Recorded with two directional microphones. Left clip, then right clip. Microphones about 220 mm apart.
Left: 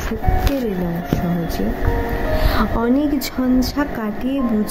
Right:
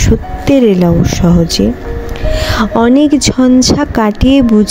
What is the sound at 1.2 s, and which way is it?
Speech, 40° right (ahead or behind).